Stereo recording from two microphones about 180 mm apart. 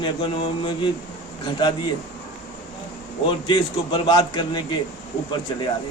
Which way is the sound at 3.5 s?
25° left (ahead or behind).